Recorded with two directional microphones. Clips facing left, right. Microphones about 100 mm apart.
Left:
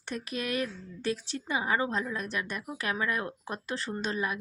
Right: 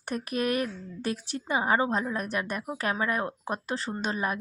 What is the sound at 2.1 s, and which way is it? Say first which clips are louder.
Speech: right 4 dB; 45° right (ahead or behind).